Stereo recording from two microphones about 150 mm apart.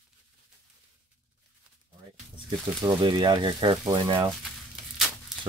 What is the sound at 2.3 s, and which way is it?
Speech, 30° right (ahead or behind).